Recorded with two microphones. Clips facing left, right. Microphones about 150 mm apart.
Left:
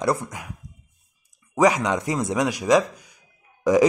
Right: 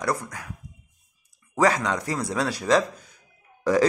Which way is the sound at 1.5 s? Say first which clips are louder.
Left 3 dB; 15° left (ahead or behind).